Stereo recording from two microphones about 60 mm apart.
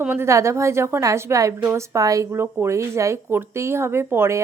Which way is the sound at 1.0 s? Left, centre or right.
Right.